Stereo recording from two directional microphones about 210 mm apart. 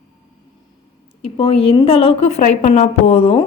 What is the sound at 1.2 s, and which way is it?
A woman's voice, 25° left (ahead or behind).